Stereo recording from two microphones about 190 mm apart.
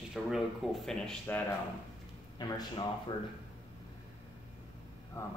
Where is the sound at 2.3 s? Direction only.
20° left (ahead or behind).